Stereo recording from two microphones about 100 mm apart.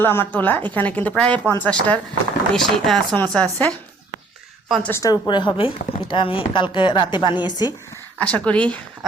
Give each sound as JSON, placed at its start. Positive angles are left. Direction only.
{"t": 0.0, "sound": "a woman's voice", "side_deg": 20}
{"t": 4.8, "sound": "speech", "side_deg": 20}
{"t": 5.0, "sound": "a woman's voice", "side_deg": 40}
{"t": 5.5, "sound": "speech", "side_deg": 60}
{"t": 8.2, "sound": "a woman's voice", "side_deg": 10}